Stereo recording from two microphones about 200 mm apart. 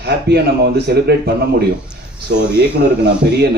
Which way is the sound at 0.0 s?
55° right (ahead or behind).